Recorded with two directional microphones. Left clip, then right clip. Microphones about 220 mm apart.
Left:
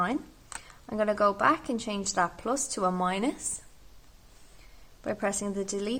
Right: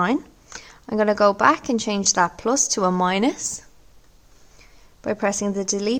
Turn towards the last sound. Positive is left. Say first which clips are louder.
# right 9 dB
turn(degrees=-30)  # may be behind; listen again after turning